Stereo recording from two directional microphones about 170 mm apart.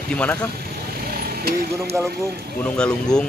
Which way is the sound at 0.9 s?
60° right (ahead or behind).